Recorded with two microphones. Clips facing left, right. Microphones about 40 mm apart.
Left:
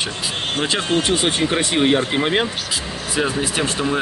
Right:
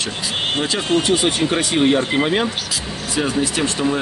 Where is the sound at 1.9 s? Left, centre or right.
Centre.